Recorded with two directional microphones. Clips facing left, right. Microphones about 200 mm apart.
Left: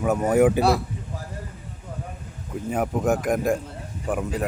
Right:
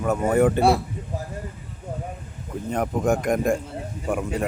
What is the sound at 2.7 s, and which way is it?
Speech, 5° left (ahead or behind).